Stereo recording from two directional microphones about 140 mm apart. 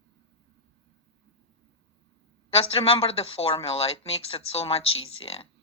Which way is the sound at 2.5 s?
45° left (ahead or behind).